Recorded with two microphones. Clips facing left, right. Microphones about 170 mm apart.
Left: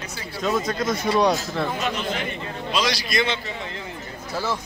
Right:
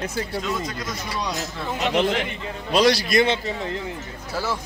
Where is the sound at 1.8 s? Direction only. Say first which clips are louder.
Right 5 dB; 80° right.